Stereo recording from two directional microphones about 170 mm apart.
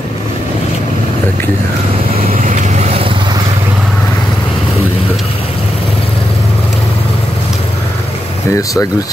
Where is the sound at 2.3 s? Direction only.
45° right (ahead or behind).